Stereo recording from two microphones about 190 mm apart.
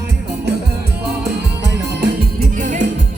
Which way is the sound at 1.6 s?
65° right (ahead or behind).